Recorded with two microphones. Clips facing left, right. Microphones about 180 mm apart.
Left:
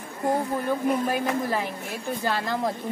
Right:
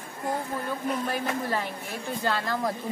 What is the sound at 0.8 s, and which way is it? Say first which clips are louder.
A woman's voice: left 3 dB; 10° left (ahead or behind).